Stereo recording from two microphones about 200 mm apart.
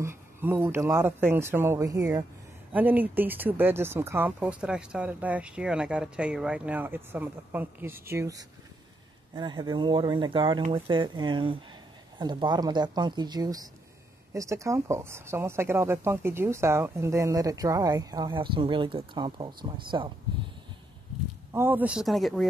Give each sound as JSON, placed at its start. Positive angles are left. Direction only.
{"t": 0.0, "sound": "speech", "side_deg": -10}
{"t": 21.5, "sound": "speech", "side_deg": -10}